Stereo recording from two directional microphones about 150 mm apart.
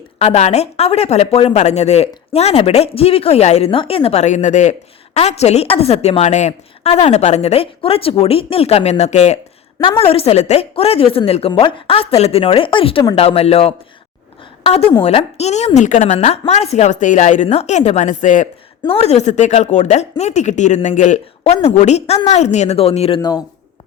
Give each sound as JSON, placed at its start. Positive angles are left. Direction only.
{"t": 0.2, "sound": "a woman's voice", "side_deg": 45}
{"t": 18.8, "sound": "speech", "side_deg": 40}